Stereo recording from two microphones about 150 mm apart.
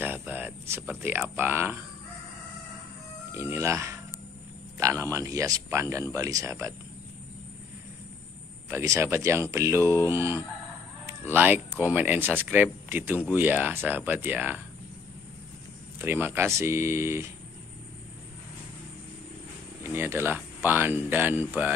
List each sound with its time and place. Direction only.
0.0 s speech: 10° right (ahead or behind)
3.3 s speech: 15° right (ahead or behind)
8.6 s speech: 20° right (ahead or behind)
16.0 s speech: 15° right (ahead or behind)
19.9 s speech: 15° right (ahead or behind)